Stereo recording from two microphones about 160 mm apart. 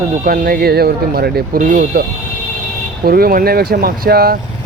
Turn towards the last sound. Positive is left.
turn(degrees=-70)  # may be behind; listen again after turning